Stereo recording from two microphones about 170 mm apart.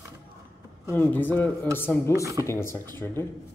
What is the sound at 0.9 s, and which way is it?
A man's voice, 10° left (ahead or behind).